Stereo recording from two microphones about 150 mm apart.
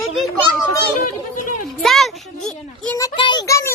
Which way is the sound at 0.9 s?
65° left (ahead or behind).